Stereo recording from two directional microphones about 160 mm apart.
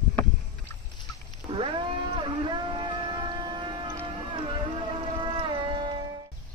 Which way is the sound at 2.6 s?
30° right (ahead or behind).